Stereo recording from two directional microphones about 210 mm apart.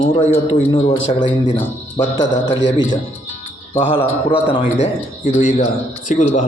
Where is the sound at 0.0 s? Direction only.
30° left (ahead or behind).